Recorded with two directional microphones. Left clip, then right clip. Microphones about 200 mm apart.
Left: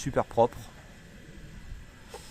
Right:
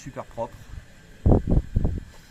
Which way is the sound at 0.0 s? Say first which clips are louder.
Left 8 dB; 60° left (ahead or behind).